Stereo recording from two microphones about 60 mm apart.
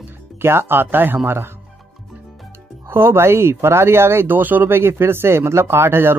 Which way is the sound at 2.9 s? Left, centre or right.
Right.